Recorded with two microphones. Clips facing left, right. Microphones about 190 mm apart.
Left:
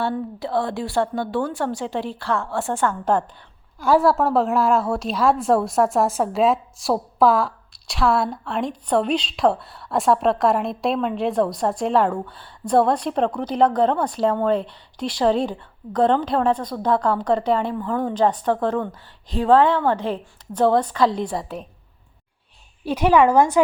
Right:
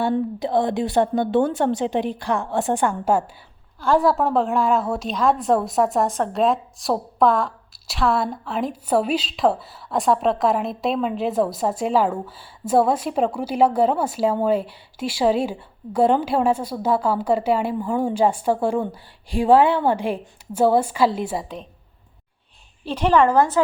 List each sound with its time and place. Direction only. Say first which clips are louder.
0.1 s a woman's voice: right 4 dB; 20° right (ahead or behind)
3.8 s a woman's voice: left 1 dB; 5° left (ahead or behind)
22.8 s a woman's voice: left 1 dB; 10° left (ahead or behind)